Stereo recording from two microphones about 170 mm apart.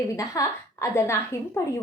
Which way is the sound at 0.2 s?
20° left (ahead or behind).